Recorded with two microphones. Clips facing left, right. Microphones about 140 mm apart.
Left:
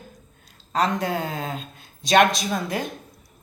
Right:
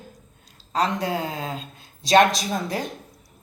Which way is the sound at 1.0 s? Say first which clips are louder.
Even; 25° right (ahead or behind).